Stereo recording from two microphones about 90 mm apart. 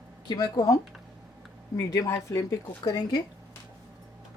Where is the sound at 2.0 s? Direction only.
50° left (ahead or behind).